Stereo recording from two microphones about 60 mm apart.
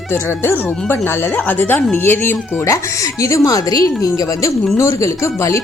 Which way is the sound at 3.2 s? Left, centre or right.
Left.